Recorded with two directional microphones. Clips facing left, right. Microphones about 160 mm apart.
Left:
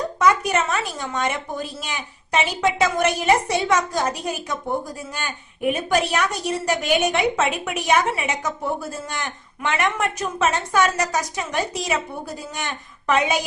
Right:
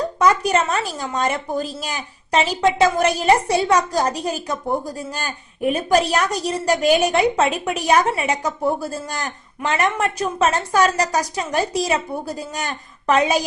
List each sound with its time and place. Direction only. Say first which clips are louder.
0.2 s a woman's voice: right 2 dB; 35° right (ahead or behind)